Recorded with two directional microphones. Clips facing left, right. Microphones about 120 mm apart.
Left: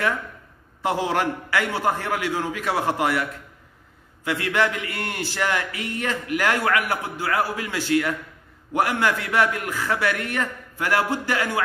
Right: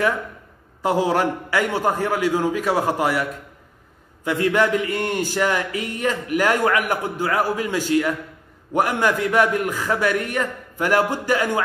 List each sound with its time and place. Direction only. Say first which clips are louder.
0.9 s a man's voice: right 5 dB; 15° right (ahead or behind)